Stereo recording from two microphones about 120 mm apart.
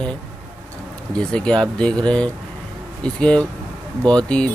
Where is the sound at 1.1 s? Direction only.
10° left (ahead or behind).